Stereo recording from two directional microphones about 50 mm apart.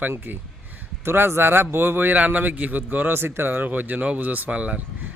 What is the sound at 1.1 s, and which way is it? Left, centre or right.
A man's voice, right.